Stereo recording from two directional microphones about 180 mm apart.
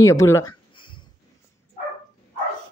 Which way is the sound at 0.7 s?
25° left (ahead or behind).